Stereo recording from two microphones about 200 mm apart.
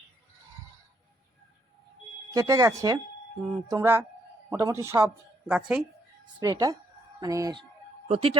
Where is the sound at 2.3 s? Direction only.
15° right (ahead or behind).